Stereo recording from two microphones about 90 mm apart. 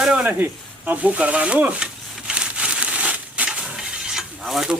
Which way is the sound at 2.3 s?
10° right (ahead or behind).